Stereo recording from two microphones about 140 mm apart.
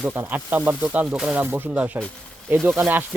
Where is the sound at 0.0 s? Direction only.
15° right (ahead or behind).